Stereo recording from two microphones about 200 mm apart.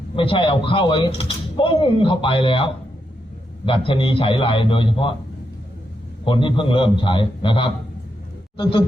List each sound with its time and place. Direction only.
0.2 s speech: 25° left (ahead or behind)
6.2 s speech: 25° left (ahead or behind)